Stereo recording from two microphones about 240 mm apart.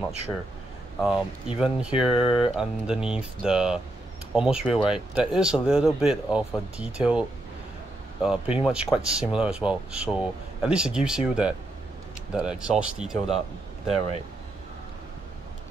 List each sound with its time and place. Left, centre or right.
1.0 s speech: centre
2.1 s speech: left
2.5 s speech: centre